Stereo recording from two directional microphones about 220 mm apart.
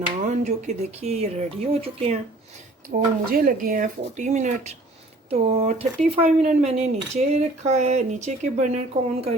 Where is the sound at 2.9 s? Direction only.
40° right (ahead or behind).